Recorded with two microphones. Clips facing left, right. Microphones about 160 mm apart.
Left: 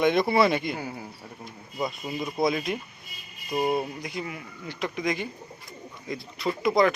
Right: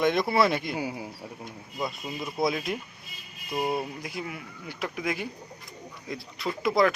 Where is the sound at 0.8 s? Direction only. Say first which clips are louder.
Right 3 dB; 10° right (ahead or behind).